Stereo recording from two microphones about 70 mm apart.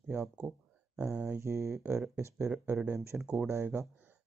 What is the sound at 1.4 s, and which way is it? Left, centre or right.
Speech, right.